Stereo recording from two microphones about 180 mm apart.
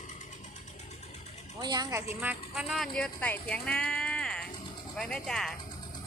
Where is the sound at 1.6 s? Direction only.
20° right (ahead or behind).